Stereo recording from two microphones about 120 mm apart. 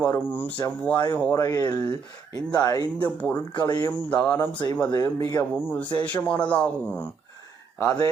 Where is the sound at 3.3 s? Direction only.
35° left (ahead or behind).